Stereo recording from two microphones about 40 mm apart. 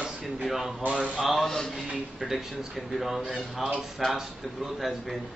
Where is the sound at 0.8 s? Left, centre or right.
Right.